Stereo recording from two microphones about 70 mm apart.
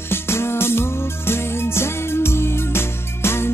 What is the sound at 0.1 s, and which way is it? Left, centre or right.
Music, left.